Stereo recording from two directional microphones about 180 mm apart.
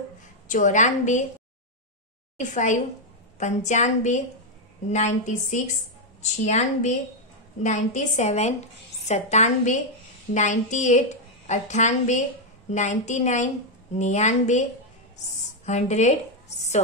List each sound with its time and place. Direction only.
0.5 s a woman's voice: 45° left (ahead or behind)
2.3 s a woman's voice: 45° left (ahead or behind)